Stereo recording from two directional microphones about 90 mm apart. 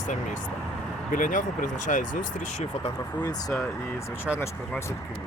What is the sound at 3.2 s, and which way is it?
Speech, 45° left (ahead or behind).